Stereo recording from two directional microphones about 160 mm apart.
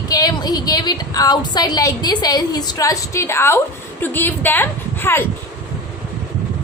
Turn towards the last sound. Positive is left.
turn(degrees=15)  # may be behind; listen again after turning